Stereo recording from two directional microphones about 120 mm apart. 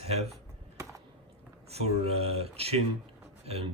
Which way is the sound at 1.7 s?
60° right (ahead or behind).